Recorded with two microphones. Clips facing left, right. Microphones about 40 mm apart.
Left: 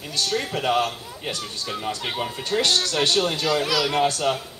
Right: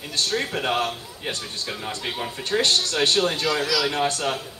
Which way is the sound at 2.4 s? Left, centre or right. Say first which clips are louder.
Right 1 dB; right.